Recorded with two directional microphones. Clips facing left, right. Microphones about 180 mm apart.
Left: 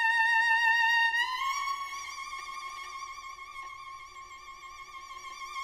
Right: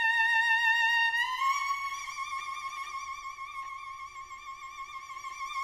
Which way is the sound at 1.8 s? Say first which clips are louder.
Right 3 dB; 35° left (ahead or behind).